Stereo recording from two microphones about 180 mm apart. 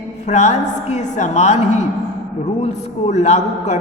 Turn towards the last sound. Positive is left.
turn(degrees=40)  # may be behind; listen again after turning